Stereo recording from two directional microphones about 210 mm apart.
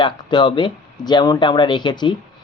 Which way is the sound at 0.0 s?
20° left (ahead or behind).